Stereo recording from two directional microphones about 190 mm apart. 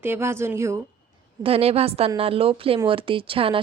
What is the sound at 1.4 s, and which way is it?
A woman's voice, 30° right (ahead or behind).